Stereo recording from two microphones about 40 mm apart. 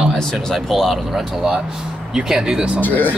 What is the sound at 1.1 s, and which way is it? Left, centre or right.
Speech, centre.